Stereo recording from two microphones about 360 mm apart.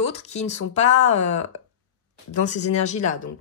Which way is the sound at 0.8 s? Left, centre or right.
Left.